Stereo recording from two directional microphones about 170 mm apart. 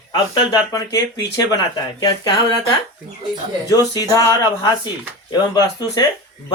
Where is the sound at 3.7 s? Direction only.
20° left (ahead or behind).